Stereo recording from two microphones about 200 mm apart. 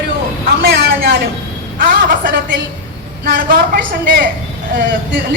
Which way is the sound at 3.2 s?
50° right (ahead or behind).